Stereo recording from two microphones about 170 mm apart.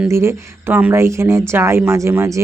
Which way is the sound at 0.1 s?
15° right (ahead or behind).